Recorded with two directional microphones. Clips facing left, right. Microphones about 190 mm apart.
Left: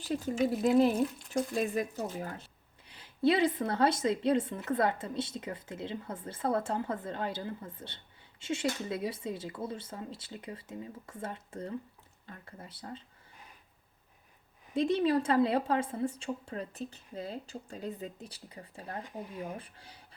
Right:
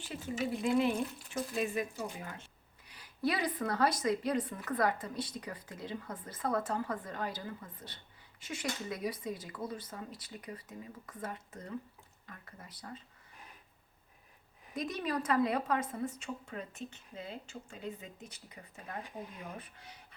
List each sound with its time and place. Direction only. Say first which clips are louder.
0.0 s a woman's voice: left 7 dB; 40° left (ahead or behind)
14.7 s a woman's voice: left 9 dB; 30° left (ahead or behind)